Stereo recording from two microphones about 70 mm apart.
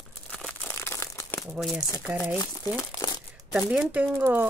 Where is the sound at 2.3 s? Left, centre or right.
Left.